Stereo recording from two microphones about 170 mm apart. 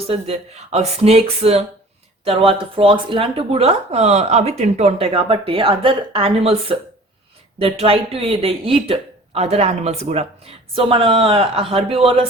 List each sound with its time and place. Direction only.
0.1 s speech: 35° right (ahead or behind)